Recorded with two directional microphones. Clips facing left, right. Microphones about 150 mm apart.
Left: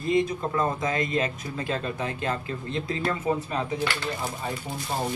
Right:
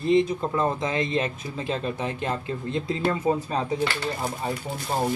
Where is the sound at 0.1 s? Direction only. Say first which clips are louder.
Right 3 dB; 25° right (ahead or behind).